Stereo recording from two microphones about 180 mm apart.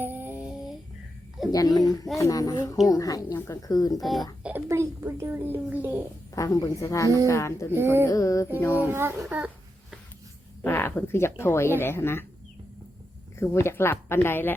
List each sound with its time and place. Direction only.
0.0 s a sound: 10° right (ahead or behind)
1.5 s speech: 20° left (ahead or behind)
4.0 s speech: centre (ahead or behind)
4.4 s a child's voice: 15° right (ahead or behind)
6.3 s speech: 20° left (ahead or behind)
7.7 s a child's voice: 15° right (ahead or behind)
8.0 s speech: 15° left (ahead or behind)
8.9 s a child's voice: 15° right (ahead or behind)
10.6 s speech: 10° left (ahead or behind)
13.4 s speech: 15° left (ahead or behind)